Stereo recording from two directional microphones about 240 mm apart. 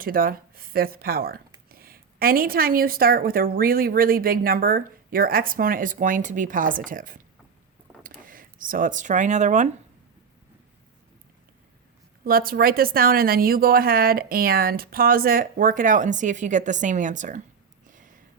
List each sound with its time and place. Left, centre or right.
0.0 s a woman's voice: right
12.2 s a woman's voice: right
17.8 s a sound: right